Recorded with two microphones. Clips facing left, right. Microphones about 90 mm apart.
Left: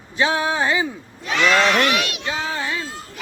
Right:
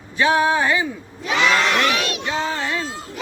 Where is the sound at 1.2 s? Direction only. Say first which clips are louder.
Even; 5° right (ahead or behind).